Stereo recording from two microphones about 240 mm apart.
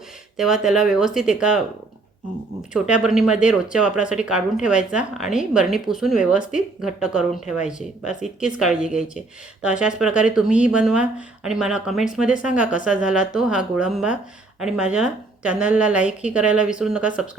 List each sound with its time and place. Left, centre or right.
0.3 s speech: centre
2.7 s speech: centre